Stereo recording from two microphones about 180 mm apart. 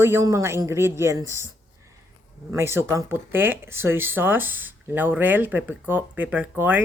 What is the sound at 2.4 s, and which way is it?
Speech, 15° right (ahead or behind).